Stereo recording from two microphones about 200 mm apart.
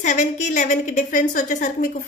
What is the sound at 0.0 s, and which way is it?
A woman's voice, 40° left (ahead or behind).